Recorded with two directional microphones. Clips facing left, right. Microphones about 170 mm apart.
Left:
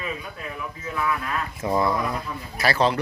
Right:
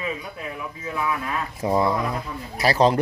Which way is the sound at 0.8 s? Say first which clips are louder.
Even; 20° right (ahead or behind).